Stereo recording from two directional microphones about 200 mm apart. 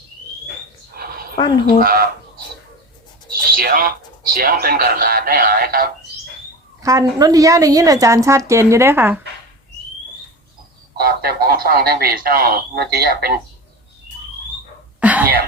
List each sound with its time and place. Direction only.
0.9 s a sound: 50° right (ahead or behind)
1.6 s speech: 50° right (ahead or behind)
3.5 s speech: 45° right (ahead or behind)
6.8 s a woman's voice: 15° right (ahead or behind)
10.9 s speech: 50° right (ahead or behind)
15.0 s cough: 10° right (ahead or behind)